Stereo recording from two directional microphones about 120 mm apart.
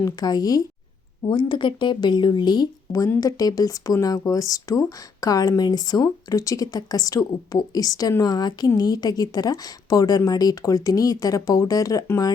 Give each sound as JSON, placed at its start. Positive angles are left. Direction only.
{"t": 0.0, "sound": "speech", "side_deg": 35}